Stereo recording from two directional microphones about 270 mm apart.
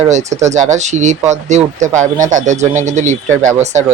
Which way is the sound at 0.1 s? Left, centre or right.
Right.